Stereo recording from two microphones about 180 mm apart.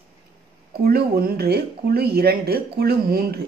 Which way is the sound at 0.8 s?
60° right (ahead or behind).